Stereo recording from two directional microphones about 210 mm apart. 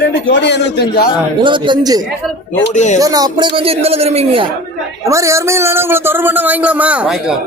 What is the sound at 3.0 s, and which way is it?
Speech, 15° right (ahead or behind).